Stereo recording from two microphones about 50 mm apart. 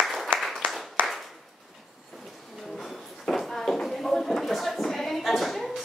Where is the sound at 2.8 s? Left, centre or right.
Centre.